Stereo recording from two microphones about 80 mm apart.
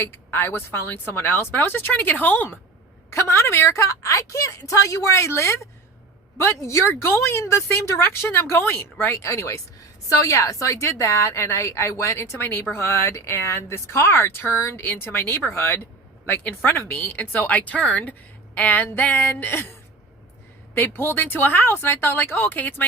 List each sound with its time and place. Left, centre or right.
0.0 s speech: left
3.1 s speech: left
20.7 s speech: left